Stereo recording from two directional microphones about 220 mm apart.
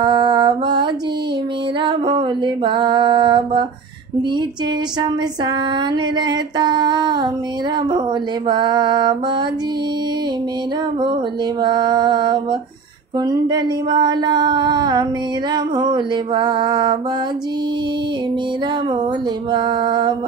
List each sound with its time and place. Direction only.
0.0 s mantra: 20° right (ahead or behind)
1.8 s music: 20° right (ahead or behind)
6.1 s music: 20° right (ahead or behind)
8.5 s music: 20° right (ahead or behind)
11.6 s music: 20° right (ahead or behind)
19.5 s music: 20° right (ahead or behind)